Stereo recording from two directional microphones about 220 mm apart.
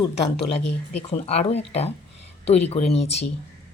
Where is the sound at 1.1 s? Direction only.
30° left (ahead or behind).